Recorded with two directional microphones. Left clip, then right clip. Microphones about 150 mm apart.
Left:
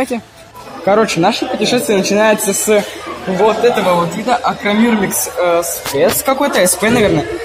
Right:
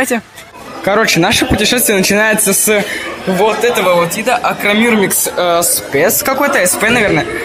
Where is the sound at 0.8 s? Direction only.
15° right (ahead or behind).